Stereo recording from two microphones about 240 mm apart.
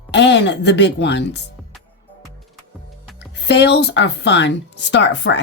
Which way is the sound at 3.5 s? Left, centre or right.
Left.